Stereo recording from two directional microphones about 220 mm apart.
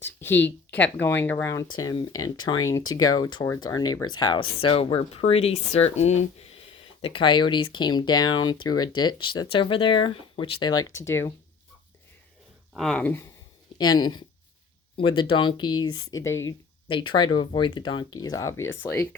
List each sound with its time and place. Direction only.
0.0 s speech: 10° left (ahead or behind)
12.7 s speech: centre (ahead or behind)
16.9 s speech: 20° left (ahead or behind)